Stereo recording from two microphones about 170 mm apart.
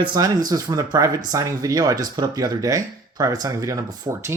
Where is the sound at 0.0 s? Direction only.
25° right (ahead or behind).